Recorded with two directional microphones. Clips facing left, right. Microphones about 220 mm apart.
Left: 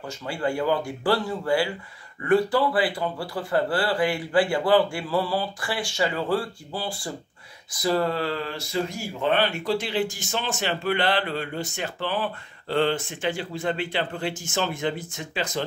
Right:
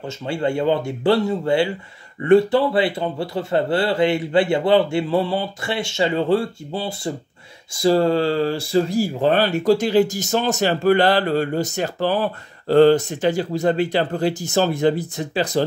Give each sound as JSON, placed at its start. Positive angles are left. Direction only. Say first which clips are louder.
{"t": 0.0, "sound": "speech", "louder": "right 5 dB", "side_deg": -25}